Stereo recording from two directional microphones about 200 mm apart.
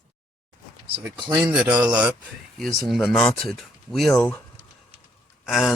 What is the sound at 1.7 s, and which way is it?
Speech, 20° right (ahead or behind).